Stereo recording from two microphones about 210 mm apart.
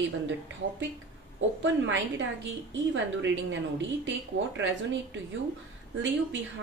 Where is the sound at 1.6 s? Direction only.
60° right (ahead or behind).